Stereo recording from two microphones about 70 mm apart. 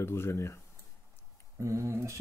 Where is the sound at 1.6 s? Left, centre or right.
Right.